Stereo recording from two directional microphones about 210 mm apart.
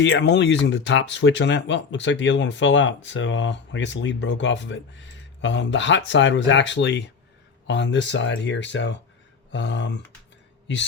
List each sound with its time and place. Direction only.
0.0 s speech: 55° left (ahead or behind)